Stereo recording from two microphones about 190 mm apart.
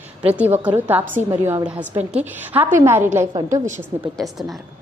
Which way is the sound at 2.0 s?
10° right (ahead or behind).